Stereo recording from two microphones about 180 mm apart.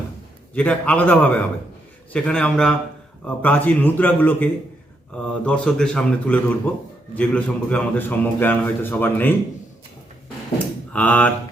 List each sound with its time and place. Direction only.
0.5 s a man's voice: 5° left (ahead or behind)
10.9 s a man's voice: 10° left (ahead or behind)